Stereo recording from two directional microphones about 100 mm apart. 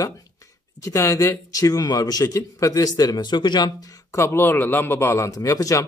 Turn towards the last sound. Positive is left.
turn(degrees=35)  # may be behind; listen again after turning